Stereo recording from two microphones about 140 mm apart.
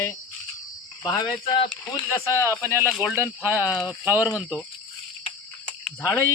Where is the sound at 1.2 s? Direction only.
45° left (ahead or behind).